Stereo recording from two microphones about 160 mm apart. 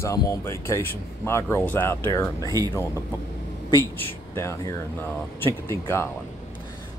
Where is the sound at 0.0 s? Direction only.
20° left (ahead or behind).